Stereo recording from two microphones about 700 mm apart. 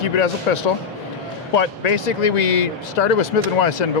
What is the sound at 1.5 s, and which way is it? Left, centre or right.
Speech, left.